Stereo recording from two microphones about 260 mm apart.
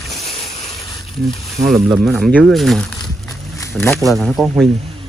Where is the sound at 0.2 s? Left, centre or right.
Left.